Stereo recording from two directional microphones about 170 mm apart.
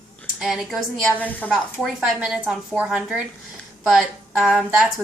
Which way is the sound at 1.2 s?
10° left (ahead or behind).